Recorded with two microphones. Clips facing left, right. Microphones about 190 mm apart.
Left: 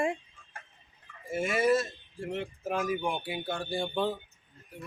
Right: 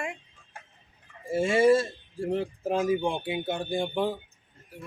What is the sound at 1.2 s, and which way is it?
Speech, 30° right (ahead or behind).